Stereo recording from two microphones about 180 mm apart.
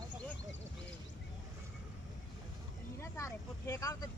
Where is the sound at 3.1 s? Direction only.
15° left (ahead or behind).